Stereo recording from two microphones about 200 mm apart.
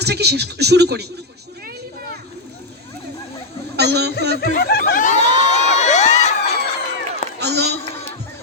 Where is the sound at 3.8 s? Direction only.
55° right (ahead or behind).